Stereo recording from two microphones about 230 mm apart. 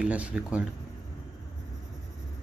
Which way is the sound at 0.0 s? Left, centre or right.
Centre.